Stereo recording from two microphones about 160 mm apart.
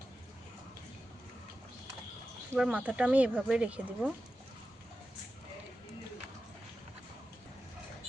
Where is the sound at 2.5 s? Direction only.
5° right (ahead or behind).